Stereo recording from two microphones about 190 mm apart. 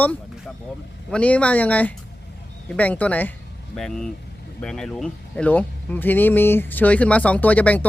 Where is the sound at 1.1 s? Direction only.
5° left (ahead or behind).